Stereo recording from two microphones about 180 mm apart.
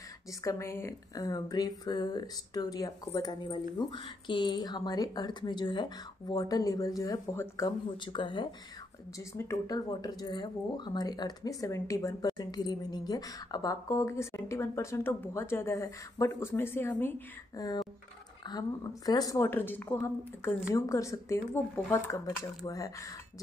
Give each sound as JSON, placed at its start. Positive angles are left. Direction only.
{"t": 0.3, "sound": "speech", "side_deg": 15}